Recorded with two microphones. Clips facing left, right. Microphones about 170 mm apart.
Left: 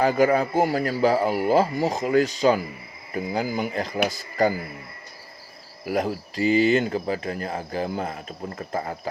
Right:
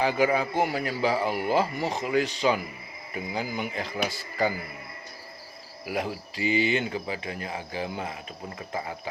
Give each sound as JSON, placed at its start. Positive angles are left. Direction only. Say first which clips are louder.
{"t": 0.0, "sound": "speech", "louder": "left 4 dB", "side_deg": 45}
{"t": 5.8, "sound": "speech", "louder": "left 6 dB", "side_deg": 40}